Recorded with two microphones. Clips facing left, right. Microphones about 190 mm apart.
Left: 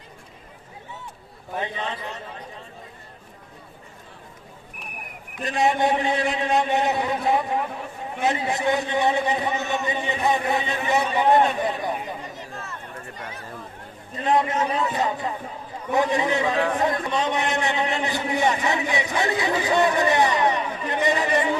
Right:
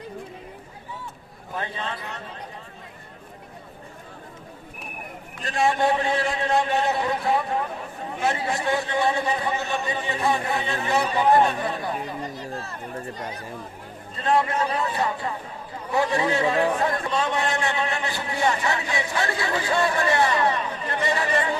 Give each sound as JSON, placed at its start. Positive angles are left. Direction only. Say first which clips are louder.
{"t": 1.5, "sound": "a man's voice", "louder": "left 2 dB", "side_deg": 20}
{"t": 5.3, "sound": "a man's voice", "louder": "left 1 dB", "side_deg": 20}
{"t": 12.2, "sound": "a sound", "louder": "right 4 dB", "side_deg": -35}
{"t": 13.1, "sound": "speech", "louder": "right 3 dB", "side_deg": -35}
{"t": 14.3, "sound": "a man's voice", "louder": "left 1 dB", "side_deg": 20}